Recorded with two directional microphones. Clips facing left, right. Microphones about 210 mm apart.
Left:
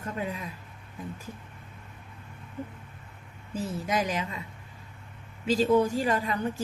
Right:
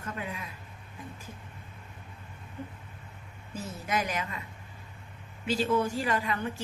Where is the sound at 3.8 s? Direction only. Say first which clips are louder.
Left 1 dB; 30° left (ahead or behind).